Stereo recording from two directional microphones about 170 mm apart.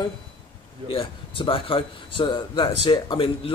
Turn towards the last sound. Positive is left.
turn(degrees=30)  # may be behind; listen again after turning